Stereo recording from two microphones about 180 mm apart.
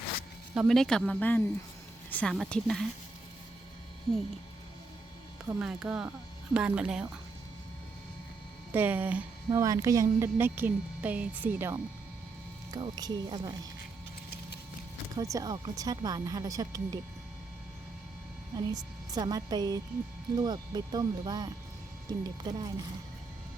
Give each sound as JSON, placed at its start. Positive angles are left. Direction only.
{"t": 0.5, "sound": "speech", "side_deg": 0}
{"t": 5.5, "sound": "speech", "side_deg": -5}
{"t": 8.7, "sound": "a woman's voice", "side_deg": -10}
{"t": 12.7, "sound": "speech", "side_deg": -25}
{"t": 15.1, "sound": "speech", "side_deg": -20}
{"t": 18.5, "sound": "speech", "side_deg": -20}